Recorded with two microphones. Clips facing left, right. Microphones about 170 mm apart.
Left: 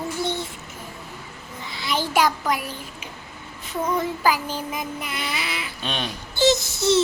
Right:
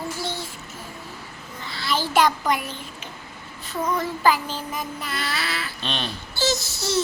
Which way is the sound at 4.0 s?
10° left (ahead or behind).